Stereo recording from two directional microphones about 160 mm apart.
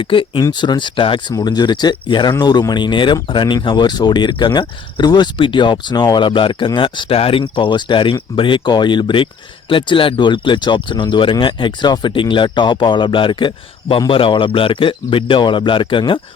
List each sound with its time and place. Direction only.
0.0 s speech: 30° left (ahead or behind)